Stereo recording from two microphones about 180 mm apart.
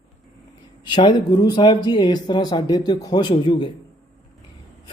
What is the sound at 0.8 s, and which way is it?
Speech, 25° left (ahead or behind).